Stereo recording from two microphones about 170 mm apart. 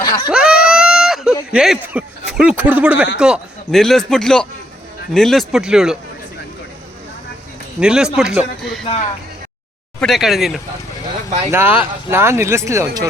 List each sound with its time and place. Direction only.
0.0 s a sound: 25° left (ahead or behind)
0.3 s a sound: 5° right (ahead or behind)
3.2 s speech: 5° right (ahead or behind)
7.8 s speech: 5° right (ahead or behind)
10.0 s speech: centre (ahead or behind)
11.5 s speech: 10° right (ahead or behind)